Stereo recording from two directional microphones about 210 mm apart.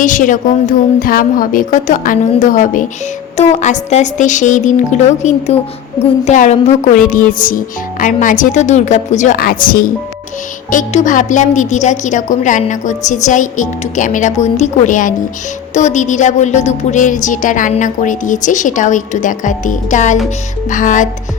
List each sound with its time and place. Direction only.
0.0 s a woman's voice: 40° left (ahead or behind)